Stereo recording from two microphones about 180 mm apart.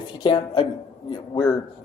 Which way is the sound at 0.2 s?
25° left (ahead or behind).